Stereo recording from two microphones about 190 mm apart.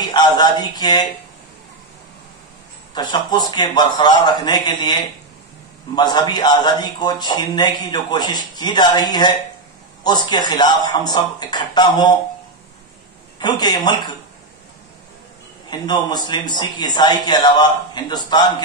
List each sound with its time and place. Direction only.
0.0 s speech: 20° left (ahead or behind)
2.9 s a man's voice: 20° left (ahead or behind)
10.3 s a man's voice: 20° left (ahead or behind)
13.4 s a man's voice: 20° left (ahead or behind)
15.7 s a man's voice: 20° left (ahead or behind)